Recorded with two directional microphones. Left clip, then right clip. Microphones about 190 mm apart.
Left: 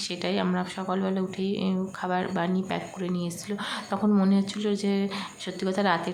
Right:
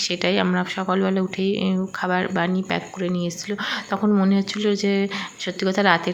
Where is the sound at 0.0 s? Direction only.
20° right (ahead or behind).